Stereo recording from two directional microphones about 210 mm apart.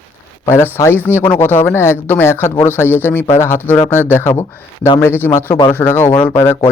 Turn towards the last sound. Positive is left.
turn(degrees=15)  # may be behind; listen again after turning